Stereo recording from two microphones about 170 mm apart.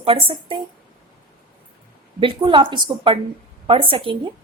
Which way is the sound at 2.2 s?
30° right (ahead or behind).